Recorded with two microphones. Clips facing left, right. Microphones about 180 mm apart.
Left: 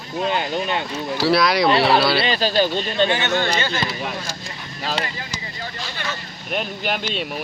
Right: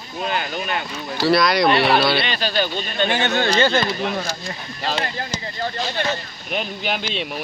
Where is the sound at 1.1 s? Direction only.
5° left (ahead or behind).